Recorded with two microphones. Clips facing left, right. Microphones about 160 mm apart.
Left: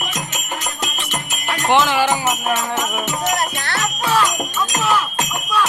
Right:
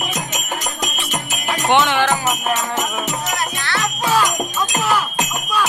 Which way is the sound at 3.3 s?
40° left (ahead or behind).